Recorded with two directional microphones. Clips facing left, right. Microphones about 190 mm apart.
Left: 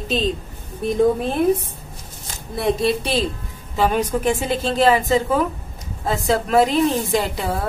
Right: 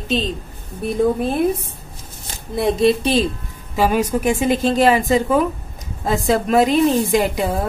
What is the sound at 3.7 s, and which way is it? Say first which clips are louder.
Speech: right 2 dB; 10° right (ahead or behind).